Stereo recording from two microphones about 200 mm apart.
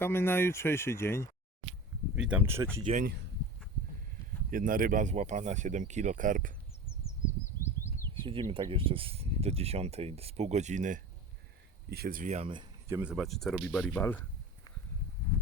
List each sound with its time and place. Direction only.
0.0 s speech: 10° left (ahead or behind)
2.1 s speech: 5° right (ahead or behind)
2.8 s speech: 40° right (ahead or behind)
4.5 s speech: 45° right (ahead or behind)
8.1 s speech: 25° right (ahead or behind)
11.9 s speech: 50° right (ahead or behind); by 13.0 s 25° right (ahead or behind)
13.0 s speech: 5° right (ahead or behind)